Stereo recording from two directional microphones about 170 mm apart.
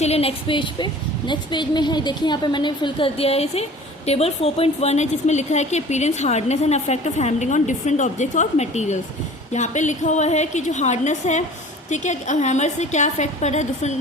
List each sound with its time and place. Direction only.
0.0 s a woman's voice: 35° left (ahead or behind)